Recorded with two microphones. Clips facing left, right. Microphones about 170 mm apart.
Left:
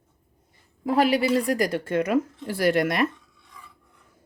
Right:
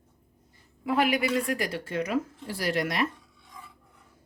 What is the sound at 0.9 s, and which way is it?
A woman's voice, 35° left (ahead or behind).